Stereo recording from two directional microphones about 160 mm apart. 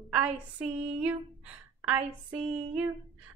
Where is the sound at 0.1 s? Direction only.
10° right (ahead or behind).